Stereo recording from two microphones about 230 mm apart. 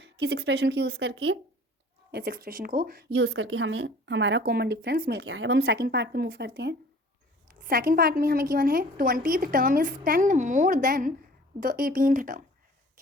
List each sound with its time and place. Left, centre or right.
0.0 s a woman's voice: right
2.1 s a woman's voice: right